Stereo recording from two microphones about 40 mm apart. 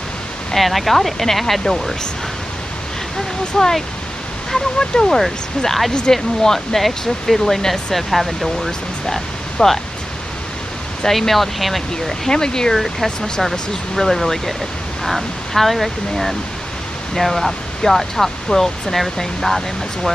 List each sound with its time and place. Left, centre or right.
0.6 s speech: centre
3.6 s speech: centre
11.1 s speech: centre
12.3 s speech: centre
12.7 s speech: centre